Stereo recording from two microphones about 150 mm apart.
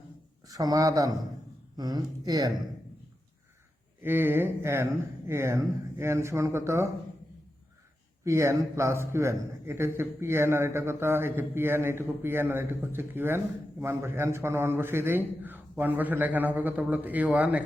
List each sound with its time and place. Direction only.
0.4 s speech: 25° right (ahead or behind)
4.0 s a man's voice: 15° right (ahead or behind)
8.2 s a man's voice: 20° right (ahead or behind)